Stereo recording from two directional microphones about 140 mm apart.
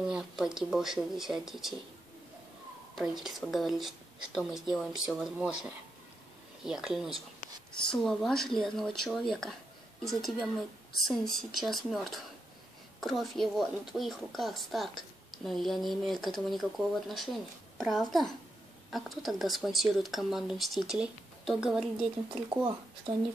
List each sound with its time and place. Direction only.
0.0 s a woman's voice: 5° right (ahead or behind)
3.0 s a woman's voice: centre (ahead or behind)
22.3 s speech: 35° right (ahead or behind)